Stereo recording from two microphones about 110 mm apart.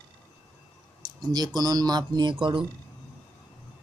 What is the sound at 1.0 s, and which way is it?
Speech, 35° right (ahead or behind).